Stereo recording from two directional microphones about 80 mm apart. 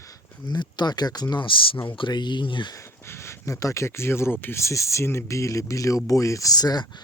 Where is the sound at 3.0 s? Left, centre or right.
Left.